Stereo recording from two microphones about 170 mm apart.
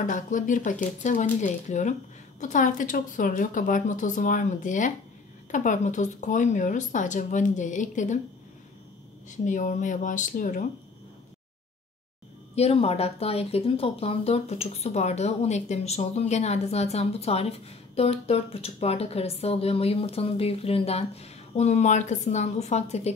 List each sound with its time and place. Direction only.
0.0 s speech: 50° left (ahead or behind)
9.3 s speech: 45° left (ahead or behind)
12.5 s speech: 35° left (ahead or behind)